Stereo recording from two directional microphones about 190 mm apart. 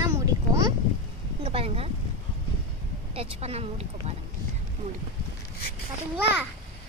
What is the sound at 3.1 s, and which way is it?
Speech, 30° right (ahead or behind).